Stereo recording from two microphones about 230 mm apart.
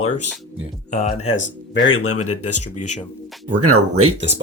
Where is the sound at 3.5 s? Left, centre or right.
Right.